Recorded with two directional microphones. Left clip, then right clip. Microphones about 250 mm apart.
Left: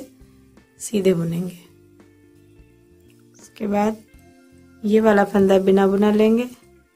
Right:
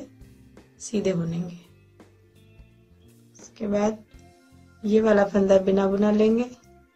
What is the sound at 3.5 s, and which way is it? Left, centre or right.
Speech, left.